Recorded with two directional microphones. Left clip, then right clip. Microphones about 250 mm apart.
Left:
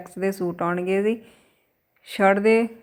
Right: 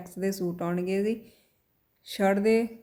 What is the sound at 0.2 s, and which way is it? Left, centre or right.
A woman's voice, centre.